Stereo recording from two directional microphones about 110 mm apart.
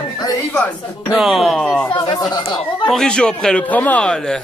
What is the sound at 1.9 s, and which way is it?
Speech, 40° left (ahead or behind).